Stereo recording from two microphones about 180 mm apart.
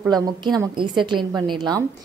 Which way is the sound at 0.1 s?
20° right (ahead or behind).